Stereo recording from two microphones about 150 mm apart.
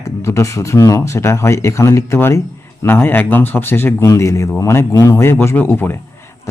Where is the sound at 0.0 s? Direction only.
20° left (ahead or behind).